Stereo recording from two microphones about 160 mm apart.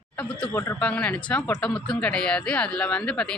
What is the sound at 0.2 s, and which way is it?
Speech, 10° left (ahead or behind).